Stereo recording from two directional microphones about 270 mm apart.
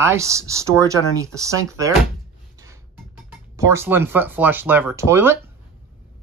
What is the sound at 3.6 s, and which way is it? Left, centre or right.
Speech, centre.